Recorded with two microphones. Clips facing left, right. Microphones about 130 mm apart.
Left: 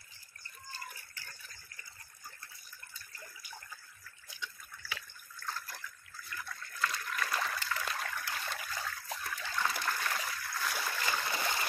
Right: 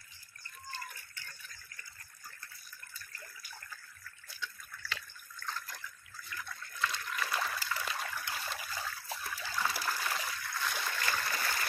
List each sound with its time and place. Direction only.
4.3 s water: 15° left (ahead or behind)